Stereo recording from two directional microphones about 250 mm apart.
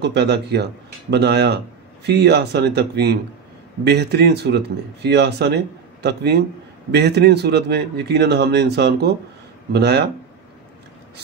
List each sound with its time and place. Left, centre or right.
0.0 s a man's voice: right